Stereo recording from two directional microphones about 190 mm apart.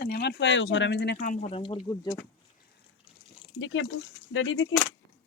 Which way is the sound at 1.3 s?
35° left (ahead or behind).